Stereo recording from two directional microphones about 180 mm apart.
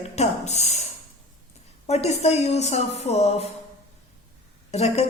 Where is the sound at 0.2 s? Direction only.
40° left (ahead or behind).